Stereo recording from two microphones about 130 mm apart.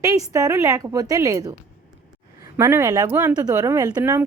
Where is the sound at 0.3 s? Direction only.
25° right (ahead or behind).